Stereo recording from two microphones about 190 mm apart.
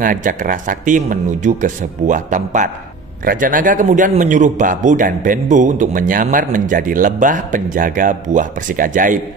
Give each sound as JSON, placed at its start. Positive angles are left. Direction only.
{"t": 0.0, "sound": "a man's voice", "side_deg": -45}